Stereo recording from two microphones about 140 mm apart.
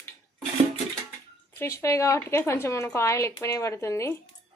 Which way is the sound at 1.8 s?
20° left (ahead or behind).